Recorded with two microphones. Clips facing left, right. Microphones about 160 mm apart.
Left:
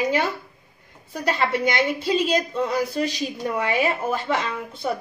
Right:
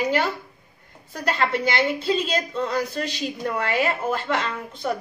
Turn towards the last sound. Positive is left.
turn(degrees=5)  # may be behind; listen again after turning